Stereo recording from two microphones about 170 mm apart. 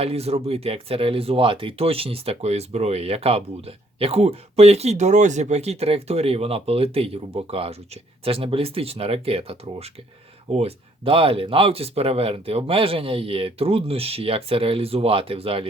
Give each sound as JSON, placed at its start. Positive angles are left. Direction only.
{"t": 0.0, "sound": "speech", "side_deg": -35}